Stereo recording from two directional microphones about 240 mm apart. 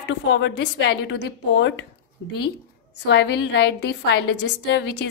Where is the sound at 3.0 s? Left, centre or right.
Left.